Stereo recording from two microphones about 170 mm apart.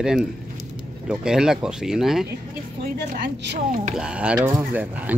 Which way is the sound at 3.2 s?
90° right.